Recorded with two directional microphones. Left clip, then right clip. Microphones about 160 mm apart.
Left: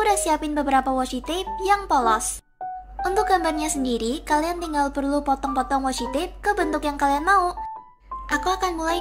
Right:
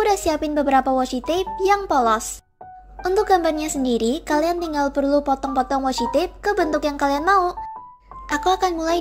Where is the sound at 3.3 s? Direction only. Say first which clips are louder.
Right 3 dB; 40° right (ahead or behind).